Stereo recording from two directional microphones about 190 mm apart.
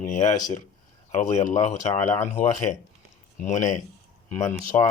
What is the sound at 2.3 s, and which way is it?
A man's voice, 40° left (ahead or behind).